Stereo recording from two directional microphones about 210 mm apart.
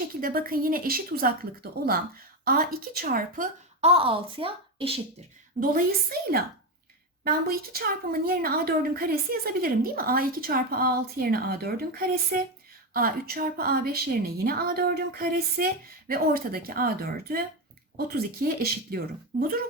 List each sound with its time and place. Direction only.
0.2 s a woman's voice: 45° right (ahead or behind); by 4.9 s 25° right (ahead or behind)
5.5 s a woman's voice: 45° right (ahead or behind)